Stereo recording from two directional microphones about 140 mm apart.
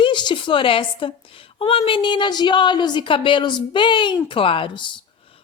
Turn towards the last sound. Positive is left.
turn(degrees=35)  # may be behind; listen again after turning